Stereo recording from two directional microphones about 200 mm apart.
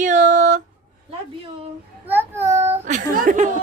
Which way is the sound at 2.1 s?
10° right (ahead or behind).